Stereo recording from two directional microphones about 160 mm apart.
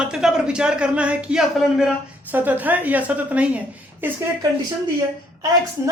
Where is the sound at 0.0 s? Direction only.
5° right (ahead or behind).